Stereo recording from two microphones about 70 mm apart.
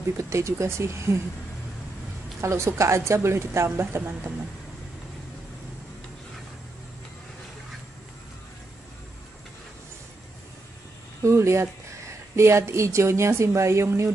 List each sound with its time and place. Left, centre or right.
0.2 s speech: right
2.4 s speech: right
11.2 s speech: right